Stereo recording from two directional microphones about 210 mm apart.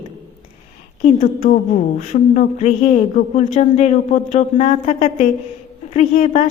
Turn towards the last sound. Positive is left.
turn(degrees=35)  # may be behind; listen again after turning